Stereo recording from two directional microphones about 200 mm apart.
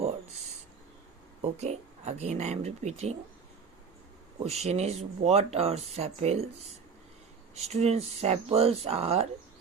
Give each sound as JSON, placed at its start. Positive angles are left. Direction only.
{"t": 1.5, "sound": "speech", "side_deg": -35}
{"t": 4.4, "sound": "speech", "side_deg": -30}
{"t": 7.5, "sound": "speech", "side_deg": -30}